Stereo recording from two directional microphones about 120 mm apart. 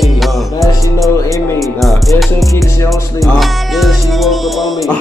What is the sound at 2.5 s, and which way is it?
Speech, 25° left (ahead or behind).